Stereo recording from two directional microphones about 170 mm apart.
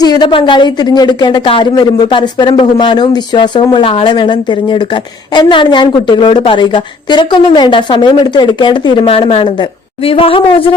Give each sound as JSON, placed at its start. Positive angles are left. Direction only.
{"t": 0.0, "sound": "a woman's voice", "side_deg": 25}